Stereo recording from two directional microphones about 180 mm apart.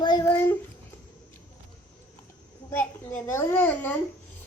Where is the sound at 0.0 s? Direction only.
20° left (ahead or behind).